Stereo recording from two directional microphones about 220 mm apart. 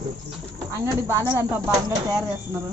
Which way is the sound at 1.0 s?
15° right (ahead or behind).